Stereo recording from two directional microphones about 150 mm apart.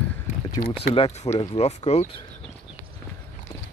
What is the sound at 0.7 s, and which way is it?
Speech, 40° left (ahead or behind).